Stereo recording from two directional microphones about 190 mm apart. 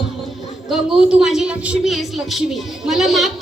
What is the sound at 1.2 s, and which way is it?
A woman's voice, 5° right (ahead or behind).